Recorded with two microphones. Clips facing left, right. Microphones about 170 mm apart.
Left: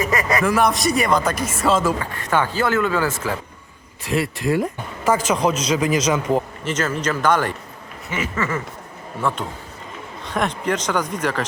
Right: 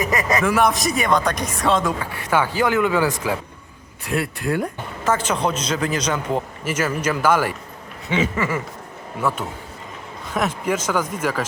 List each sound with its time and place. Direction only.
0.0 s a sound: 20° right (ahead or behind)
0.4 s speech: centre (ahead or behind)
2.0 s speech: 10° right (ahead or behind)
4.0 s a man's voice: centre (ahead or behind)
6.7 s speech: 10° right (ahead or behind)